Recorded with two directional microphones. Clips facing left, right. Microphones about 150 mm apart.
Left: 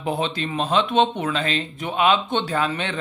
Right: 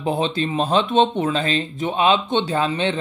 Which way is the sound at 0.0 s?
30° right (ahead or behind).